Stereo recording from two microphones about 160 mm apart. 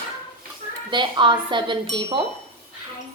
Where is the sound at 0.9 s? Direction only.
30° right (ahead or behind).